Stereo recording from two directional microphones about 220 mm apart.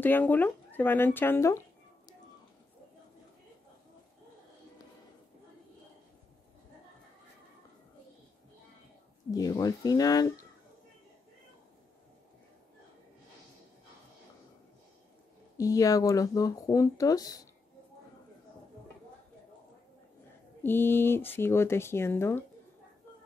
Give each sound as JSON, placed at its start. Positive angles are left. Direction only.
{"t": 0.0, "sound": "speech", "side_deg": 10}
{"t": 9.3, "sound": "speech", "side_deg": 15}
{"t": 15.5, "sound": "speech", "side_deg": 15}
{"t": 20.6, "sound": "speech", "side_deg": 10}